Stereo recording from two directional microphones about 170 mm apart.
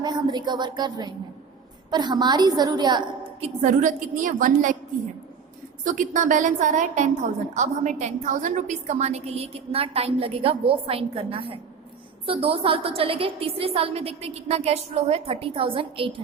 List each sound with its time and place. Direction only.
0.0 s speech: 25° right (ahead or behind)
3.4 s a woman's voice: 45° right (ahead or behind)
5.8 s a woman's voice: 50° right (ahead or behind); by 16.2 s 30° right (ahead or behind)